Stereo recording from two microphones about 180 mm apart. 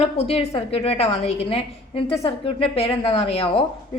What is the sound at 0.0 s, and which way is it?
A woman's voice, 35° left (ahead or behind).